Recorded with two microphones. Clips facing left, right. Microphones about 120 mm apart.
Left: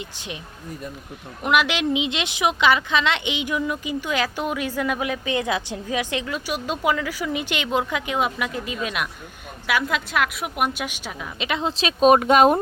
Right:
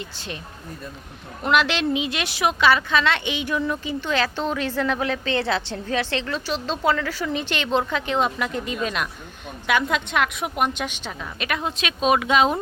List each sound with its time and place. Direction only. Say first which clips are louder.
0.0 s a woman's voice: even; 15° left (ahead or behind)
1.5 s a woman's voice: even; 15° left (ahead or behind)
11.4 s speech: left 2 dB; 25° left (ahead or behind); by 12.5 s 50° left (ahead or behind)